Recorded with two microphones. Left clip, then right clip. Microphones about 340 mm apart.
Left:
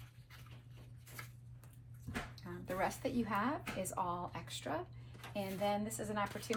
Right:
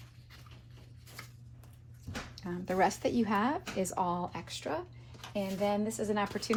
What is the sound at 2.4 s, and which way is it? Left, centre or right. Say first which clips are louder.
A woman's voice: right 10 dB; right.